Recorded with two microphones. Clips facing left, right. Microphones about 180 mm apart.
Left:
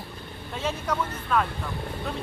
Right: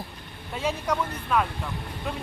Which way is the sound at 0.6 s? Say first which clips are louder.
Right 1 dB; 10° right (ahead or behind).